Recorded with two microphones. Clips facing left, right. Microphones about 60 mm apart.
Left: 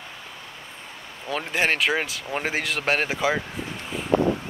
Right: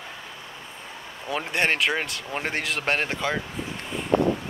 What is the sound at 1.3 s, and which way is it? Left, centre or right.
Speech, centre.